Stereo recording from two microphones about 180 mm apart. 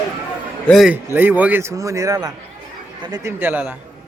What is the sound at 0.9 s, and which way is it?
Speech, 10° right (ahead or behind).